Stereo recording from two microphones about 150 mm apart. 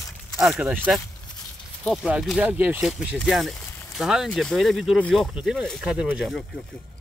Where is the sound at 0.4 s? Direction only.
5° right (ahead or behind).